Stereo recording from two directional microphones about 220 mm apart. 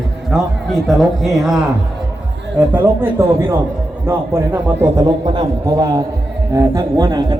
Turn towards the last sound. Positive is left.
turn(degrees=-15)  # may be behind; listen again after turning